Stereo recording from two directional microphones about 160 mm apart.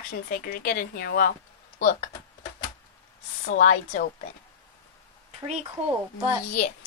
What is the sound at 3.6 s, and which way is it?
Speech, 55° left (ahead or behind).